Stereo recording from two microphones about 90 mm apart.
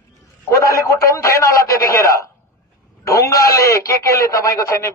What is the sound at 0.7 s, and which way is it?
Speech, 35° left (ahead or behind).